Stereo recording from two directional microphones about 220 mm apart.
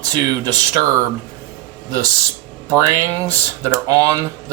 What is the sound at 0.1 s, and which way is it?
Speech, 15° right (ahead or behind).